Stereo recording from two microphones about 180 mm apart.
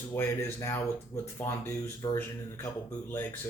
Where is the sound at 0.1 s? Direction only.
10° left (ahead or behind).